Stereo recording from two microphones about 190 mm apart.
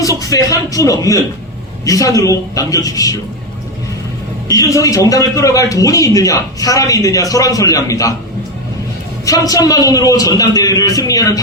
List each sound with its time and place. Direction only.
0.0 s a man's voice: 15° left (ahead or behind)
4.4 s a man's voice: 15° left (ahead or behind)
9.2 s a man's voice: 20° left (ahead or behind)